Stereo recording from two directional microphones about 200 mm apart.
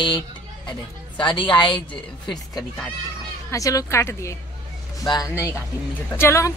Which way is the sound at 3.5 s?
15° left (ahead or behind).